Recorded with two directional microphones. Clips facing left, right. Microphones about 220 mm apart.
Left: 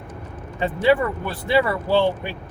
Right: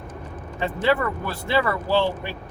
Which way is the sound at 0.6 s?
15° left (ahead or behind).